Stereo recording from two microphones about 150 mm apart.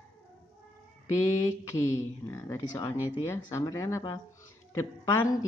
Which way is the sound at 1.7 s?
20° left (ahead or behind).